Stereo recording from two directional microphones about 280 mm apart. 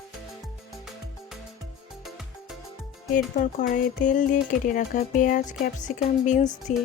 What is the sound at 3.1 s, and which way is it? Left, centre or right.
Speech, left.